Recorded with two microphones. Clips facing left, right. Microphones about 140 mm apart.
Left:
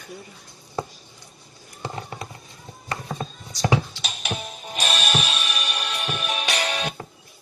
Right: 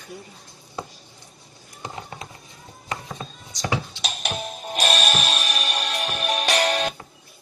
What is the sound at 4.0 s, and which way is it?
Music, 45° right (ahead or behind).